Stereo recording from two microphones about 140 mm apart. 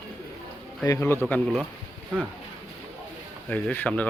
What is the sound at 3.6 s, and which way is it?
Speech, 10° left (ahead or behind).